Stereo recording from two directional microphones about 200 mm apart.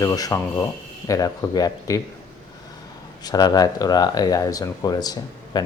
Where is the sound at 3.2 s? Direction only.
20° left (ahead or behind).